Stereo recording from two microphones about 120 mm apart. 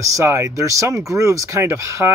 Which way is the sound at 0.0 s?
25° right (ahead or behind).